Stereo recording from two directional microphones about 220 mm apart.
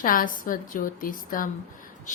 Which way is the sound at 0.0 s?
40° left (ahead or behind).